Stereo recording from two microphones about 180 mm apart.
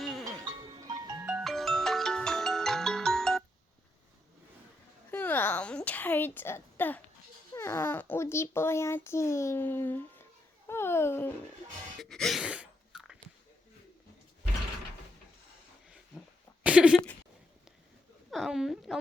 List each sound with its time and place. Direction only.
0.0 s music: centre (ahead or behind)
0.7 s music: 20° right (ahead or behind)
1.3 s music: 5° right (ahead or behind)
5.1 s a sound: 10° left (ahead or behind)
7.5 s a child's voice: 15° left (ahead or behind)
10.7 s babbling: 15° left (ahead or behind)
12.0 s a sound: centre (ahead or behind)
16.6 s a sound: 5° right (ahead or behind)
18.3 s speech: centre (ahead or behind)